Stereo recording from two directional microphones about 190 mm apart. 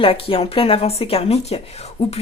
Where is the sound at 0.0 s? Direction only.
30° left (ahead or behind).